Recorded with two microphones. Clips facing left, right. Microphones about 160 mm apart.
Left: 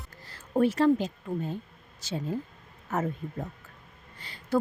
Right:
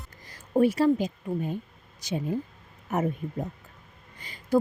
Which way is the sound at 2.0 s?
15° right (ahead or behind).